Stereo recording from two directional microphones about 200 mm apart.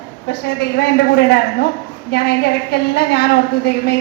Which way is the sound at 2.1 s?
55° left (ahead or behind).